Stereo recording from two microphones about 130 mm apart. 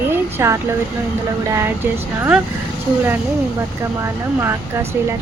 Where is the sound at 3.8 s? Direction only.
20° right (ahead or behind).